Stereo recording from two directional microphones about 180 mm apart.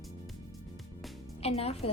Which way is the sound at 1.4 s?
35° left (ahead or behind).